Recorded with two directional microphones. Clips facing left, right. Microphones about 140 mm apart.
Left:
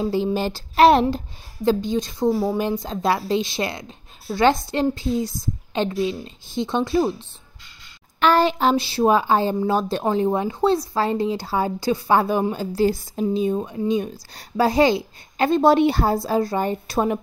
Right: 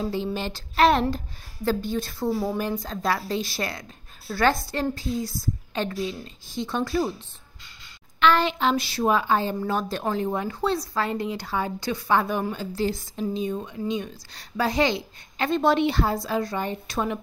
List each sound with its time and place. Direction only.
0.1 s a woman's voice: 35° left (ahead or behind)
1.1 s a woman's voice: 20° left (ahead or behind)
8.2 s a woman's voice: 40° left (ahead or behind)